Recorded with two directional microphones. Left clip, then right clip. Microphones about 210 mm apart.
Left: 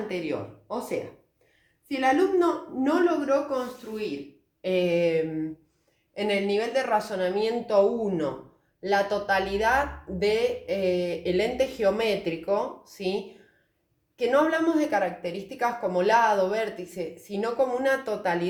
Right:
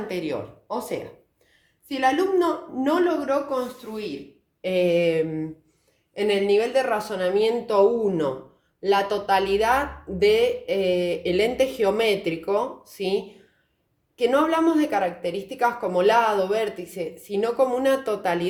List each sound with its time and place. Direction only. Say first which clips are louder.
0.1 s a woman's voice: right 2 dB; 40° right (ahead or behind)
14.2 s speech: right 3 dB; 50° right (ahead or behind)